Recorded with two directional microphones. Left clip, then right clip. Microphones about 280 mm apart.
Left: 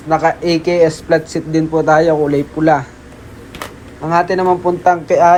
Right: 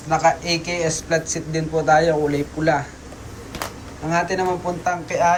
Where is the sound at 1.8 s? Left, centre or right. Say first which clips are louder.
Left 4 dB; centre.